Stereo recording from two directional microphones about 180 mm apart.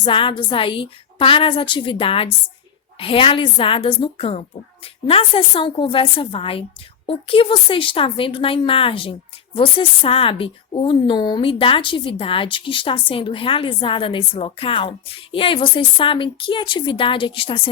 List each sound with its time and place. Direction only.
0.0 s a woman's voice: 30° left (ahead or behind)